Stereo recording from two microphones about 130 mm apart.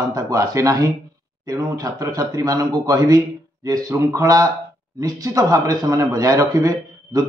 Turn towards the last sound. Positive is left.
turn(degrees=-25)  # may be behind; listen again after turning